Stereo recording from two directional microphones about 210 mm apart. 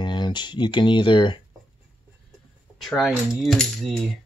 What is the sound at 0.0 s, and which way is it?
Speech, 20° left (ahead or behind).